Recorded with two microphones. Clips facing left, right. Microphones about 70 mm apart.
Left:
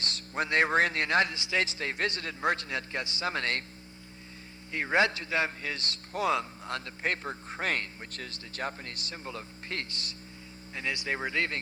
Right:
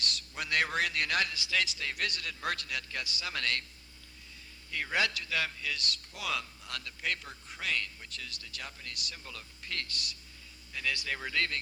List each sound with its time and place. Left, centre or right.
0.0 s speech: left
4.7 s a man's voice: left